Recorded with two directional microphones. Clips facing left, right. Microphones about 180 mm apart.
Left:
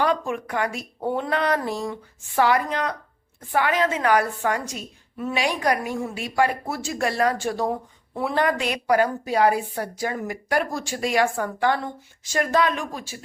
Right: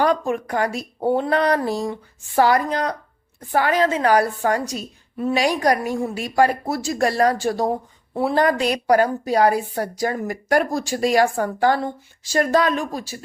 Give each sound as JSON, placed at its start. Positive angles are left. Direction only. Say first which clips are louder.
{"t": 0.0, "sound": "a woman's voice", "louder": "right 4 dB", "side_deg": -40}